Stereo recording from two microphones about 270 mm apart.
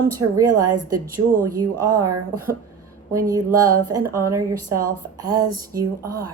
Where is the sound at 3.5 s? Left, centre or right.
Right.